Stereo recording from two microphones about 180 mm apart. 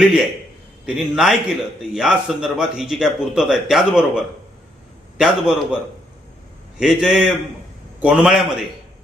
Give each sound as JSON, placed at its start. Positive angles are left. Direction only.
{"t": 0.0, "sound": "a man's voice", "side_deg": -5}
{"t": 6.7, "sound": "a man's voice", "side_deg": -5}